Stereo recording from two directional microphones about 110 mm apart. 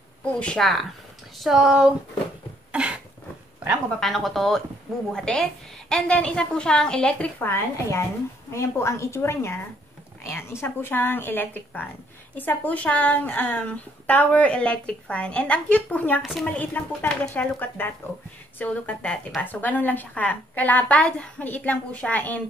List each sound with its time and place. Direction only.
0.2 s speech: 10° left (ahead or behind); by 2.0 s 10° right (ahead or behind)
2.7 s cough: 10° right (ahead or behind)
4.0 s a woman's voice: centre (ahead or behind)
16.2 s speech: centre (ahead or behind)
16.4 s a woman's voice: 15° left (ahead or behind)